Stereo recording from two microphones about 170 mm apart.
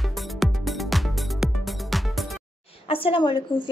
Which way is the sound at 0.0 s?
Centre (ahead or behind).